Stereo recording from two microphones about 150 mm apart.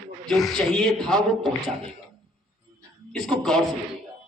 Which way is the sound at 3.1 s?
5° left (ahead or behind).